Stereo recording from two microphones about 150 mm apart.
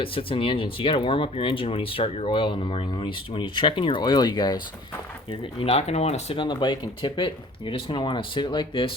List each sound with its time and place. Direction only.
0.0 s speech: 35° left (ahead or behind)